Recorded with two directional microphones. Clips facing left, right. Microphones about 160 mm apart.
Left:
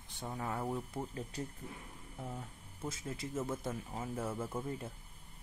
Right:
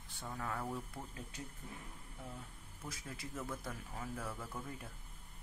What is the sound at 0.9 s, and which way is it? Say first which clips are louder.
Speech: left 8 dB; 35° left (ahead or behind).